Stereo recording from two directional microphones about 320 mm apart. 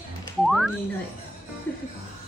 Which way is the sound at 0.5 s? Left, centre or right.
Centre.